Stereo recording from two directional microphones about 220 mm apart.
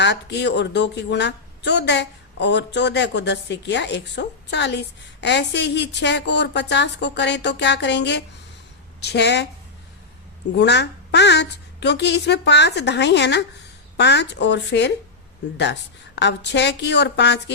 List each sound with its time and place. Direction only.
0.0 s a woman's voice: 50° left (ahead or behind)
10.6 s a woman's voice: 50° left (ahead or behind)